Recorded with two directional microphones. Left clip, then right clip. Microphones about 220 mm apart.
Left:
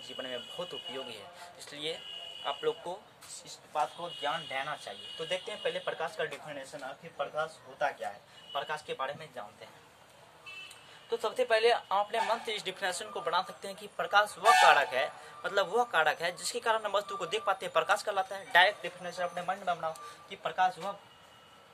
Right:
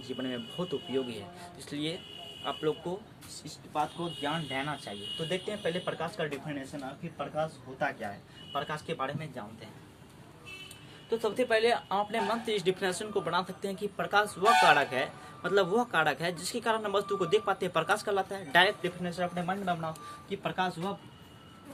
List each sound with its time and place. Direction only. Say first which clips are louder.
0.0 s speech: right 2 dB; centre (ahead or behind)
8.5 s speech: right 1 dB; 10° left (ahead or behind)
11.1 s speech: right 1 dB; 15° left (ahead or behind)